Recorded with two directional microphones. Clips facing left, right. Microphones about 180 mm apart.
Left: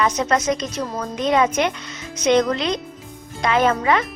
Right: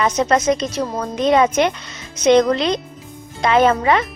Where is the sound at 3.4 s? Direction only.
25° right (ahead or behind).